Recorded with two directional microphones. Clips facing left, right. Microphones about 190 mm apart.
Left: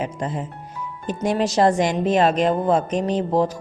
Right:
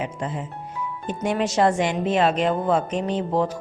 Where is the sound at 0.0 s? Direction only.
40° left (ahead or behind).